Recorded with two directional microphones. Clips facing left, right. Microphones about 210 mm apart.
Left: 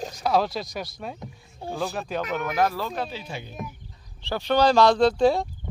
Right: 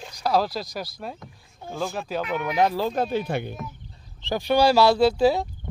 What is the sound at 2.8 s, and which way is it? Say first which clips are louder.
Speech: right 7 dB; 45° right (ahead or behind).